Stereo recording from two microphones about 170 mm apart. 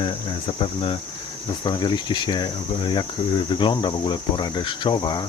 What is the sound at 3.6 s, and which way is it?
Speech, 30° left (ahead or behind).